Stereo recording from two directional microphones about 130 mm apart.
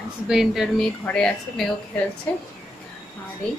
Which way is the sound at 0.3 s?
5° right (ahead or behind).